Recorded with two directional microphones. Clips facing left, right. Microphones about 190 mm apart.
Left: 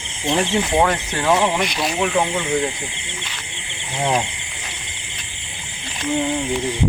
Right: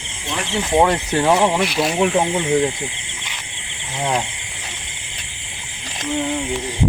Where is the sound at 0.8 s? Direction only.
20° right (ahead or behind).